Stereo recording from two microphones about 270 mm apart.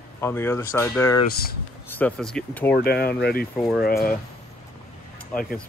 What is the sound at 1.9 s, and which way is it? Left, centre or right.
Speech, centre.